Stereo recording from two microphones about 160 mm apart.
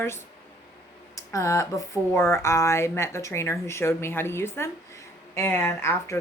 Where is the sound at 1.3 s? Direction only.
20° left (ahead or behind).